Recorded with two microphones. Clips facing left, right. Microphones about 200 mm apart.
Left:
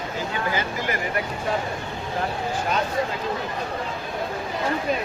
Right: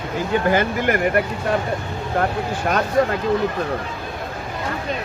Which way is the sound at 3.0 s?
50° right (ahead or behind).